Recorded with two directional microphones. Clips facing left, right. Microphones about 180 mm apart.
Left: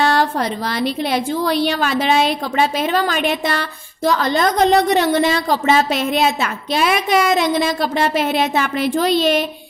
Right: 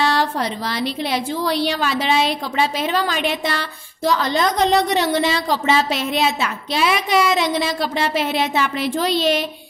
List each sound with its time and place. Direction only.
0.0 s a woman's voice: 50° left (ahead or behind)